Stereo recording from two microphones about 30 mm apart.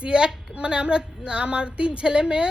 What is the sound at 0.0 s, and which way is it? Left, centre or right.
A woman's voice, right.